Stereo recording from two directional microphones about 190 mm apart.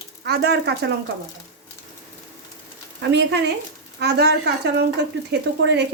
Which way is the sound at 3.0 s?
65° right (ahead or behind).